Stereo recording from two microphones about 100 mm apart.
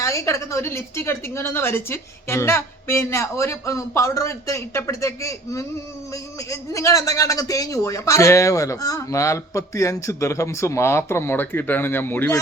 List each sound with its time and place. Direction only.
0.0 s a man's voice: 30° left (ahead or behind)